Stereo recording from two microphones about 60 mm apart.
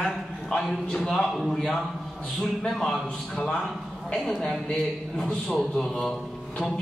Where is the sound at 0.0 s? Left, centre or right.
Centre.